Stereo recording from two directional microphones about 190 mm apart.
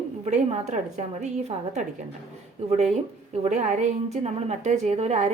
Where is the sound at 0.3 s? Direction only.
40° right (ahead or behind).